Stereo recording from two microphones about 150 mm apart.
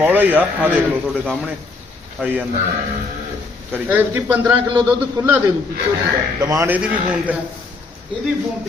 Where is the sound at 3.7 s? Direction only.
10° right (ahead or behind).